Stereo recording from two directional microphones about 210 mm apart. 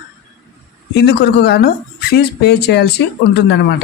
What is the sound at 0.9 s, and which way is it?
Speech, 50° left (ahead or behind).